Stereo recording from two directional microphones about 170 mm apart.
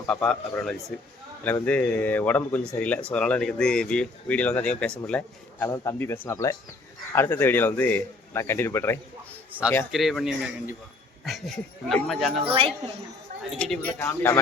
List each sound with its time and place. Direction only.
0.1 s speech: 5° left (ahead or behind)
5.6 s speech: 20° left (ahead or behind)
9.9 s speech: centre (ahead or behind)
12.5 s a woman's voice: 35° right (ahead or behind)
13.6 s speech: 10° left (ahead or behind)